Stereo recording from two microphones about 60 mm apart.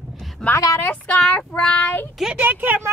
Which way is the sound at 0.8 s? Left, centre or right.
Left.